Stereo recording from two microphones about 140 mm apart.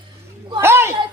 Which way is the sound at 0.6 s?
20° right (ahead or behind).